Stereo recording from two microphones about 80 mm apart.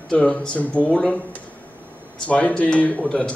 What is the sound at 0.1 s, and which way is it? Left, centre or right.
Speech, centre.